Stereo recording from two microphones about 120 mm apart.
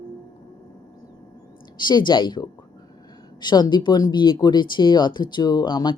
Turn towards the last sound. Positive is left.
turn(degrees=40)  # may be behind; listen again after turning